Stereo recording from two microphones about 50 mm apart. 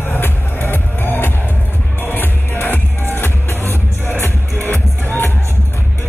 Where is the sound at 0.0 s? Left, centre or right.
Left.